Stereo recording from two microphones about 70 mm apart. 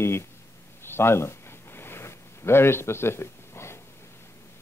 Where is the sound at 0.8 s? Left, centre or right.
Left.